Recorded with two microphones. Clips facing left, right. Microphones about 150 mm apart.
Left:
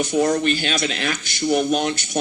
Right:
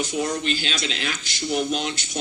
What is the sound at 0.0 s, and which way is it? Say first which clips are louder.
Speech: left 7 dB; 55° left (ahead or behind).